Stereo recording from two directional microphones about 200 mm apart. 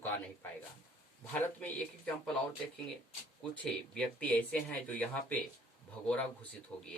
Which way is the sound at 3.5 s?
5° left (ahead or behind).